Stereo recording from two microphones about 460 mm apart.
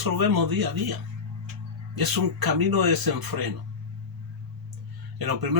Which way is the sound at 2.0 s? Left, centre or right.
Right.